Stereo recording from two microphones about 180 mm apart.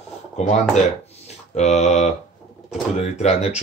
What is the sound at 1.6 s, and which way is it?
Speech, 40° left (ahead or behind).